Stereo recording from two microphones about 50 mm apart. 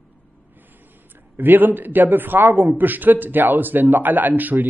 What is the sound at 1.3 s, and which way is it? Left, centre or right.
A man's voice, right.